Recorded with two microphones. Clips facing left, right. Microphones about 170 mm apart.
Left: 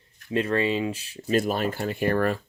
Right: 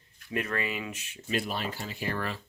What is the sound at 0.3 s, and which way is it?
Speech, 30° left (ahead or behind).